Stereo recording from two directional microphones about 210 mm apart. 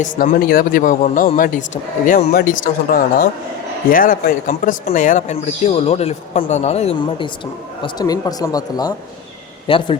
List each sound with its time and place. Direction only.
0.0 s speech: 40° left (ahead or behind)